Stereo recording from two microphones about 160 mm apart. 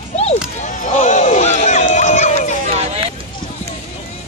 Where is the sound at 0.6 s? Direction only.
50° left (ahead or behind).